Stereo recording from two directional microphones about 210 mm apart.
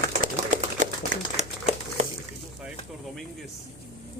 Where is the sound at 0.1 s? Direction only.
35° right (ahead or behind).